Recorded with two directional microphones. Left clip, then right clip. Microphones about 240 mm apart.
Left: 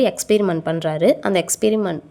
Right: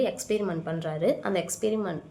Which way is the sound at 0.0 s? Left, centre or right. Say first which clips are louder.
Left 10 dB; left.